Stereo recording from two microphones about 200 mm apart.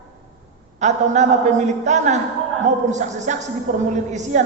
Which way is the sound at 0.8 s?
35° right (ahead or behind).